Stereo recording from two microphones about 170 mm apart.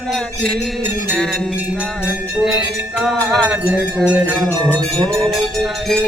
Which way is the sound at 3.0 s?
Centre (ahead or behind).